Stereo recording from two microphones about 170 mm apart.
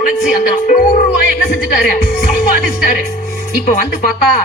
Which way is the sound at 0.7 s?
55° left (ahead or behind).